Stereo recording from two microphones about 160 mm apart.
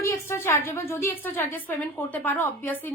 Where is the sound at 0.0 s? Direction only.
15° left (ahead or behind).